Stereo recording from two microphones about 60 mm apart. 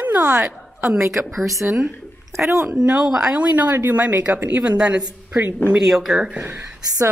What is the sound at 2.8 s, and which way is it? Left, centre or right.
Speech, centre.